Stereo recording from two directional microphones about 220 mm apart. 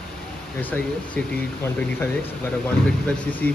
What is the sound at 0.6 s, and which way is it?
Speech, 10° left (ahead or behind).